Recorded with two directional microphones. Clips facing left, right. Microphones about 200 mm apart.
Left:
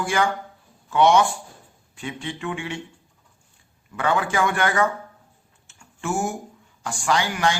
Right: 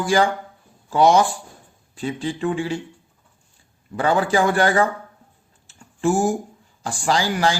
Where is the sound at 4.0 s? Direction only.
35° right (ahead or behind).